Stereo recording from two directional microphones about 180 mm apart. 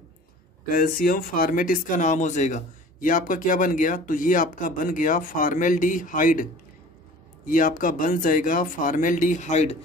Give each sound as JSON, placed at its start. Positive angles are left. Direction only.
{"t": 0.7, "sound": "speech", "side_deg": 55}
{"t": 7.4, "sound": "speech", "side_deg": 50}